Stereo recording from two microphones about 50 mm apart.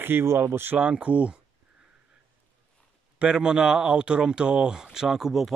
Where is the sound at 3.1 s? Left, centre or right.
Centre.